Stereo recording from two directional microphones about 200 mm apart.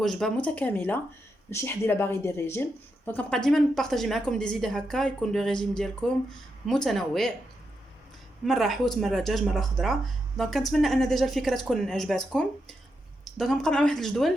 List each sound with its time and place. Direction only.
0.0 s a woman's voice: centre (ahead or behind)
8.4 s a woman's voice: centre (ahead or behind)